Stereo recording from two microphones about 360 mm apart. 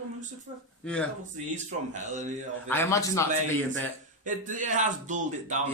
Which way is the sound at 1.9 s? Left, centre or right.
Centre.